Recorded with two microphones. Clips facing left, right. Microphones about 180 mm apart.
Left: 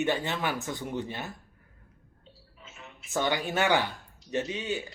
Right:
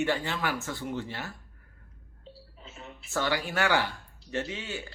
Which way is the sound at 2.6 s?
35° right (ahead or behind).